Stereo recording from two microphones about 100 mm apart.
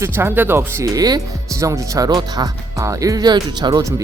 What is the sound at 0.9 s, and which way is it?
Speech, 40° right (ahead or behind).